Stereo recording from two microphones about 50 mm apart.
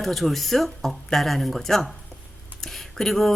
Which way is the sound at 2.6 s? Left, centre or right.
Centre.